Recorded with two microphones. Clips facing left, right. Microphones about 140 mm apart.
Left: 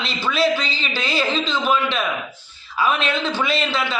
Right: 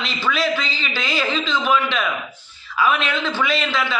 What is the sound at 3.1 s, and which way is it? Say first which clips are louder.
Speech: even; 15° left (ahead or behind).